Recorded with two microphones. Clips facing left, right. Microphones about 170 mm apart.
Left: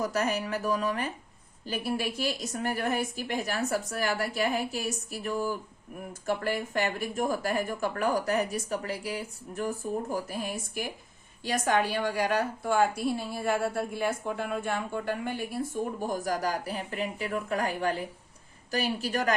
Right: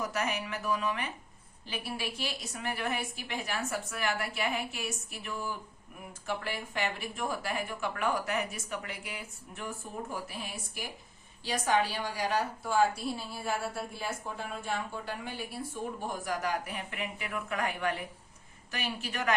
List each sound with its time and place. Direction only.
0.0 s a woman's voice: 40° left (ahead or behind)